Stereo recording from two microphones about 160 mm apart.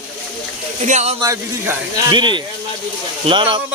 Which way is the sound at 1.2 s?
25° right (ahead or behind).